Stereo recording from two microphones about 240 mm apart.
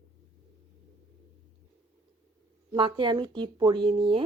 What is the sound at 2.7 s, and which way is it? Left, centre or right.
Speech, centre.